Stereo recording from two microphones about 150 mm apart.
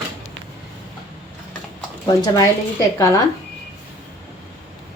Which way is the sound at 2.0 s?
25° left (ahead or behind).